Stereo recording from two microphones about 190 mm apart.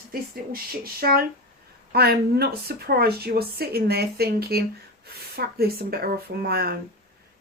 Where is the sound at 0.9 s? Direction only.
50° right (ahead or behind).